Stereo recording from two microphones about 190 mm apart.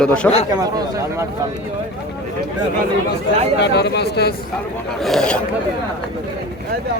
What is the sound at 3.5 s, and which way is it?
Speech, 65° left (ahead or behind).